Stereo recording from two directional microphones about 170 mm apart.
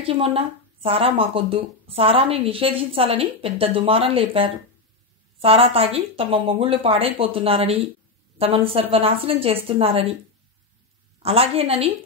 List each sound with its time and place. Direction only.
0.0 s a woman's voice: 35° right (ahead or behind)
11.2 s a woman's voice: 35° right (ahead or behind)